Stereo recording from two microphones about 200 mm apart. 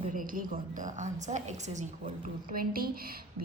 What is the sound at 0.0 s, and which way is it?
A woman's voice, 40° right (ahead or behind).